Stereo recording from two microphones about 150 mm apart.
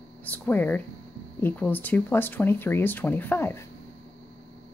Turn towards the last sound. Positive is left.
turn(degrees=15)  # may be behind; listen again after turning